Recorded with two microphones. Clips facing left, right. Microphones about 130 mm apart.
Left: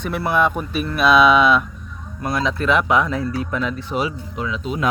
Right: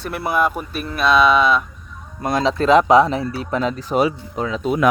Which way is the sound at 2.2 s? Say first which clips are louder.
Right 3 dB; 25° right (ahead or behind).